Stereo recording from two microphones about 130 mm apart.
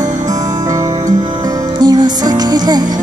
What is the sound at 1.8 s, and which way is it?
Music, 30° right (ahead or behind).